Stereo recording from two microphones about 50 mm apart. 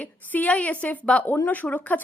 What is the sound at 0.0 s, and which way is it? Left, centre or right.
A woman's voice, left.